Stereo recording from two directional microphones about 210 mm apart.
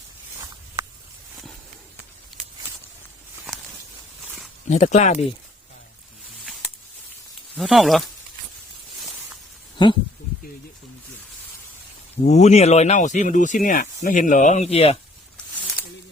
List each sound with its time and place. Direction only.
4.7 s speech: 35° left (ahead or behind)
6.4 s a sound: centre (ahead or behind)
7.5 s speech: centre (ahead or behind)
9.8 s speech: 20° left (ahead or behind)
12.2 s speech: 35° left (ahead or behind)